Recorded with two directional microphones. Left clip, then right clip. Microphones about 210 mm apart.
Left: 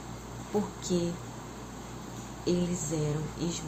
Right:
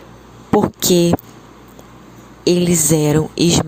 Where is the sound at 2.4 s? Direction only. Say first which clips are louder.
Right 16 dB; 55° right (ahead or behind).